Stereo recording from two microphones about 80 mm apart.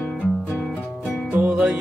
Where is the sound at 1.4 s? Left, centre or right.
Centre.